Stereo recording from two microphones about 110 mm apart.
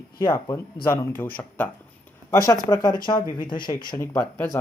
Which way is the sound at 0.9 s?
15° left (ahead or behind).